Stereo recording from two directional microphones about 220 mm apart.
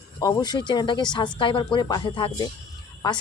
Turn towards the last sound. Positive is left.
turn(degrees=20)  # may be behind; listen again after turning